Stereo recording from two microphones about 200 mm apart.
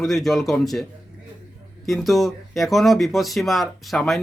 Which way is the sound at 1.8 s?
Centre (ahead or behind).